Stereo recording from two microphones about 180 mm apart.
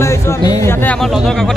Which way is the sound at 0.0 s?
15° left (ahead or behind).